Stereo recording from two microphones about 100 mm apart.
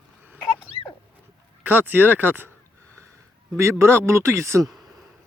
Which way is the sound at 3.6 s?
25° right (ahead or behind).